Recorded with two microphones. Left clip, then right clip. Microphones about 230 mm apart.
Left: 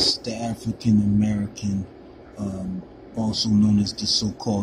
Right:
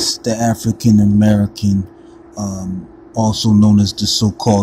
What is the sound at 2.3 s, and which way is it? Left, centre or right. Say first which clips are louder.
Speech: right 7 dB; centre.